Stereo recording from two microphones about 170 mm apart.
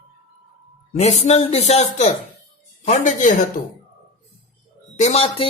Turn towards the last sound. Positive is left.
turn(degrees=35)  # may be behind; listen again after turning